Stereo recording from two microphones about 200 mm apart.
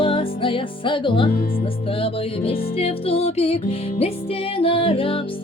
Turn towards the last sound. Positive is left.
turn(degrees=25)  # may be behind; listen again after turning